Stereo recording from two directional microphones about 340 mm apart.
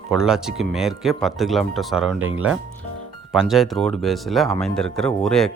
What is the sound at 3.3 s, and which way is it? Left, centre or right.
Speech, centre.